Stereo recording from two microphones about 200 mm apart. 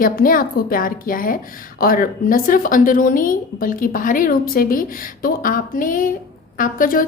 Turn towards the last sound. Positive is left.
turn(degrees=45)  # may be behind; listen again after turning